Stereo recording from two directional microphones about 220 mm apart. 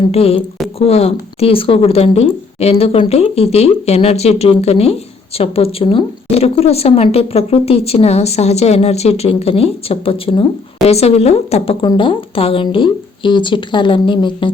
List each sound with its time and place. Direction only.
0.1 s speech: 30° left (ahead or behind)